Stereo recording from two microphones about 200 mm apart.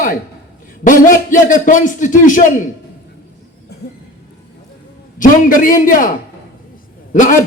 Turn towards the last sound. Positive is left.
turn(degrees=40)  # may be behind; listen again after turning